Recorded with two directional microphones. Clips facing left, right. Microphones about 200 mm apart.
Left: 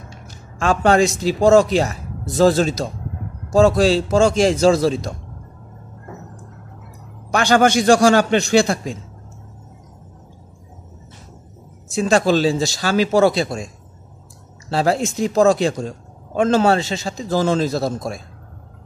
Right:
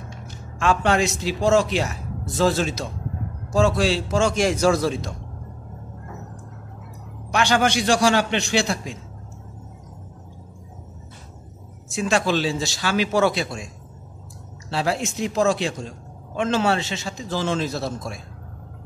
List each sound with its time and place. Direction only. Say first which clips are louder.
0.6 s speech: left 5 dB; 35° left (ahead or behind)
7.2 s a man's voice: left 5 dB; 45° left (ahead or behind)
11.9 s speech: left 5 dB; 35° left (ahead or behind)
14.7 s speech: left 6 dB; 40° left (ahead or behind)